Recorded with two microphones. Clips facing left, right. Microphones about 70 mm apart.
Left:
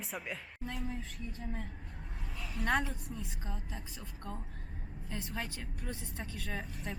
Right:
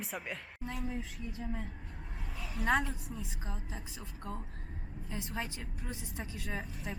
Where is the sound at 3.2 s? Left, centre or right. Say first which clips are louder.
Even; centre.